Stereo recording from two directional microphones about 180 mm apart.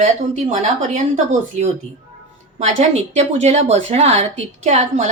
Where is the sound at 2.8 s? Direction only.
40° right (ahead or behind).